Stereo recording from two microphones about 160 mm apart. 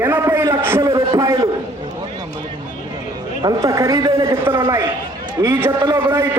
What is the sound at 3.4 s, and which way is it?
A man's voice, 20° right (ahead or behind).